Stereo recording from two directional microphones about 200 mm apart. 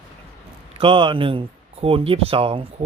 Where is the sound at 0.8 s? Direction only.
25° right (ahead or behind).